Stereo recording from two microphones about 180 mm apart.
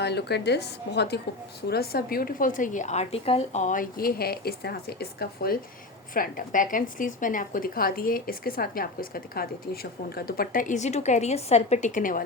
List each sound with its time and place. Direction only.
0.0 s a woman's voice: 70° left (ahead or behind)
6.1 s a woman's voice: 50° left (ahead or behind)